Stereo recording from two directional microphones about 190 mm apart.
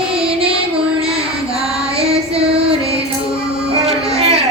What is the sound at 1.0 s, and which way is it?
Child singing, 30° right (ahead or behind).